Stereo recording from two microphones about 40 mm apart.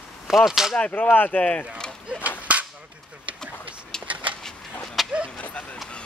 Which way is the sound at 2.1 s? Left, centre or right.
Right.